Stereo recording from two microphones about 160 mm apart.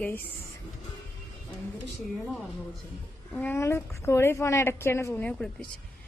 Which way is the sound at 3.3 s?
10° left (ahead or behind).